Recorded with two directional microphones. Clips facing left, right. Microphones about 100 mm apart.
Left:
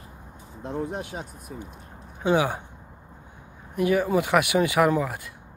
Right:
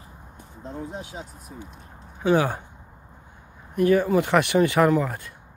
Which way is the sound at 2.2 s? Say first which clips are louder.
Right 1 dB; 10° left (ahead or behind).